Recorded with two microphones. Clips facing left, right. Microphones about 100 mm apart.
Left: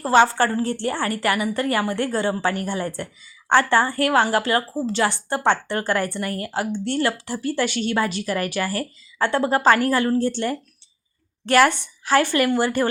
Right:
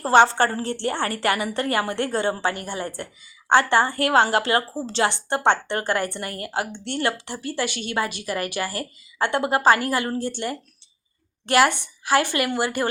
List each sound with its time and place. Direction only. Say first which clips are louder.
0.0 s a woman's voice: even; 25° right (ahead or behind)